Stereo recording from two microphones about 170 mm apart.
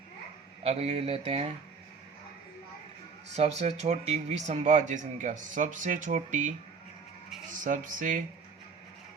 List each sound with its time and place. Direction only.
0.6 s speech: 35° right (ahead or behind)
3.3 s speech: 40° right (ahead or behind)
7.6 s speech: 50° right (ahead or behind)